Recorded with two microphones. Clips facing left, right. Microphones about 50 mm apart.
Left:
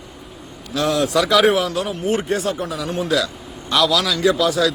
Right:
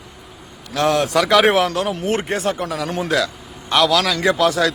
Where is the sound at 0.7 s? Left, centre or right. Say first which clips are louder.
Right 1 dB; right.